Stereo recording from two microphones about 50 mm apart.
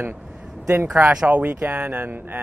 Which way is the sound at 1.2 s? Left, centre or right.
Right.